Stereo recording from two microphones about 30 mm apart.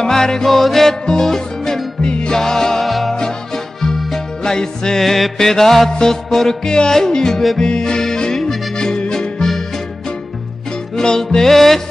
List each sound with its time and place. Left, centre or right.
0.0 s music: centre
0.5 s mantra: centre
1.0 s music: left
2.0 s music: left
2.3 s music: centre
2.8 s music: centre
3.2 s music: centre
5.0 s mantra: centre
5.9 s music: left
7.1 s music: centre
11.0 s mantra: centre